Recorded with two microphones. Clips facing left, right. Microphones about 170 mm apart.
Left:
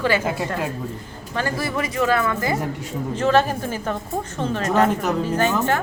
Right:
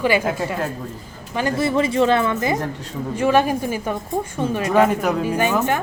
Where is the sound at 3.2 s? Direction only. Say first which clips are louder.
Right 2 dB; 10° right (ahead or behind).